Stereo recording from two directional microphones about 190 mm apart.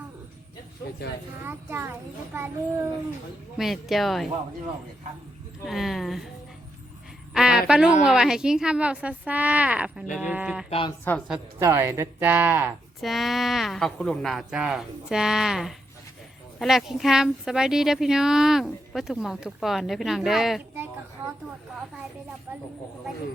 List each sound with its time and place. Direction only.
1.5 s child singing: 10° right (ahead or behind)
3.6 s speech: centre (ahead or behind)
5.6 s speech: centre (ahead or behind)
7.3 s a woman's voice: 5° right (ahead or behind)
10.7 s a woman's voice: 25° left (ahead or behind)
11.3 s speech: 10° right (ahead or behind)